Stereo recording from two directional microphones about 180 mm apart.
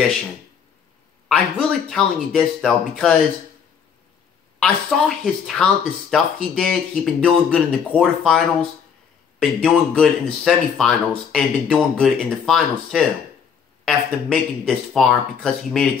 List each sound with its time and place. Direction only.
1.9 s speech: centre (ahead or behind)
4.6 s speech: 5° left (ahead or behind)